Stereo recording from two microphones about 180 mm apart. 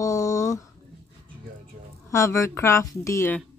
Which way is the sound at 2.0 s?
15° left (ahead or behind).